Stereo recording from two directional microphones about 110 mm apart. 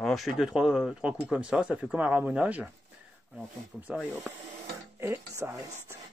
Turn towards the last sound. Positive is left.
turn(degrees=-25)  # may be behind; listen again after turning